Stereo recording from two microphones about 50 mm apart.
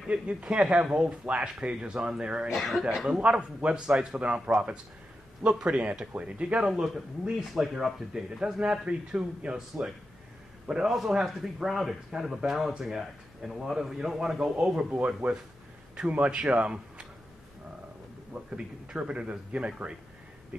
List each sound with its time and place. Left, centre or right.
0.1 s speech: right
2.5 s speech: centre
3.1 s speech: right
7.3 s speech: centre
8.4 s speech: right
10.9 s speech: centre
14.9 s speech: right
18.3 s speech: right